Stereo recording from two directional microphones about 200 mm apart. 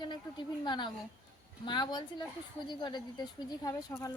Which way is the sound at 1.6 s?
20° left (ahead or behind).